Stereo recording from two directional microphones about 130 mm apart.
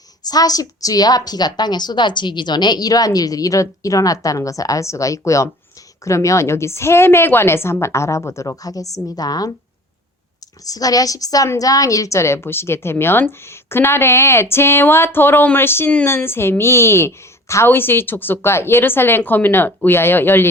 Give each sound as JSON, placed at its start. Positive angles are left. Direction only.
{"t": 0.3, "sound": "a woman's voice", "side_deg": 30}
{"t": 10.7, "sound": "a woman's voice", "side_deg": 30}